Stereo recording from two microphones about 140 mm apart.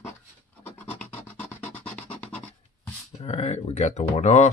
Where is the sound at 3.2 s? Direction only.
50° left (ahead or behind).